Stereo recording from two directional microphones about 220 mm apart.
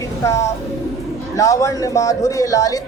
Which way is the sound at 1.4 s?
15° left (ahead or behind).